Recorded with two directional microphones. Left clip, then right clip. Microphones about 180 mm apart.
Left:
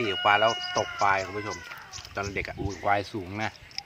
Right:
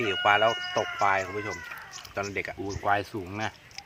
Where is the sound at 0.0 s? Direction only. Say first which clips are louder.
Even; 5° right (ahead or behind).